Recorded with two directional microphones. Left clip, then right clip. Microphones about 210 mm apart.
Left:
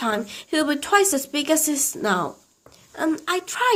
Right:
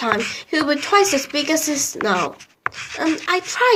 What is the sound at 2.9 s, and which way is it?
Speech, 40° left (ahead or behind).